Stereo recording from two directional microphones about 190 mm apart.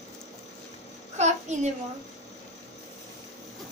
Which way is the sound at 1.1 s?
35° right (ahead or behind).